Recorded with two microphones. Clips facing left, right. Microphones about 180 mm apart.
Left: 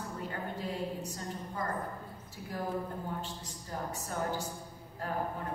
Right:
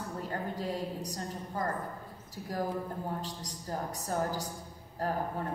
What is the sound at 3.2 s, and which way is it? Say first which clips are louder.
A woman's voice: right 2 dB; 40° right (ahead or behind).